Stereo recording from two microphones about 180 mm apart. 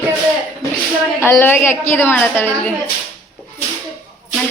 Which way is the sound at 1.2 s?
10° left (ahead or behind).